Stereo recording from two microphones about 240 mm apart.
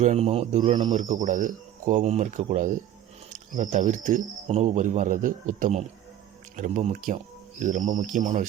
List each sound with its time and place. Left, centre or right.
0.0 s a man's voice: right
0.9 s speech: right